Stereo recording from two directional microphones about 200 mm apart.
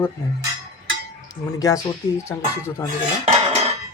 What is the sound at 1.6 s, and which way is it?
Speech, 15° left (ahead or behind).